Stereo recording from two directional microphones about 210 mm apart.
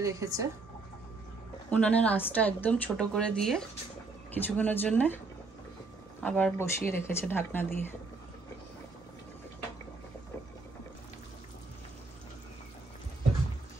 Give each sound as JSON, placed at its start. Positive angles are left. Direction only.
{"t": 0.0, "sound": "speech", "side_deg": -15}
{"t": 1.7, "sound": "a woman's voice", "side_deg": 5}
{"t": 6.2, "sound": "speech", "side_deg": 10}